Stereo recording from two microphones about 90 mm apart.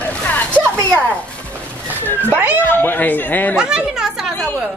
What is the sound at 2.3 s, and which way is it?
Speech, 20° right (ahead or behind).